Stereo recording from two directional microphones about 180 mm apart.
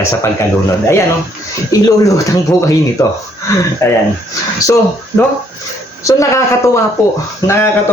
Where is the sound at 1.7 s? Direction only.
20° left (ahead or behind).